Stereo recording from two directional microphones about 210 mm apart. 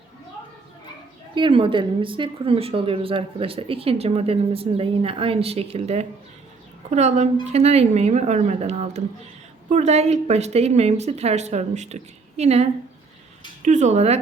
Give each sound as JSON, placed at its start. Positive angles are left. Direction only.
{"t": 1.4, "sound": "a woman's voice", "side_deg": -25}
{"t": 13.7, "sound": "a woman's voice", "side_deg": -35}